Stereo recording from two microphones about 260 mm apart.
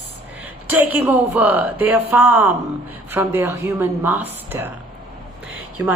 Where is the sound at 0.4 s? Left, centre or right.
Centre.